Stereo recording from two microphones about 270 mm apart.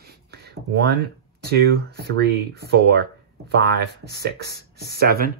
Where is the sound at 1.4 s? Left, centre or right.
Right.